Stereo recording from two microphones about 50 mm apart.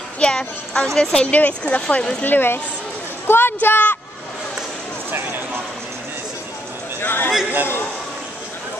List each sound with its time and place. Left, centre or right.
0.2 s a woman's voice: centre
1.3 s speech: left
2.2 s a woman's voice: left
3.3 s a sound: left
3.6 s a woman's voice: left
7.0 s a sound: left